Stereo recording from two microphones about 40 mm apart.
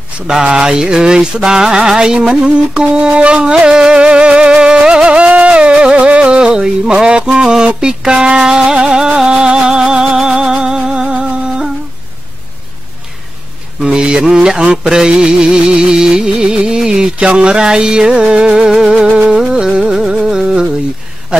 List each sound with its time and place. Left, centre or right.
0.3 s speech: centre
3.3 s music: right
13.8 s speech: right
15.0 s music: centre
15.7 s speech: centre
19.0 s music: right
20.2 s a sound: centre